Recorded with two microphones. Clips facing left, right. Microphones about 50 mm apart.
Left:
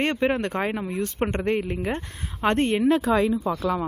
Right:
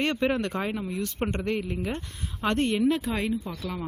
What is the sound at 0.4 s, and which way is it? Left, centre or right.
Speech, left.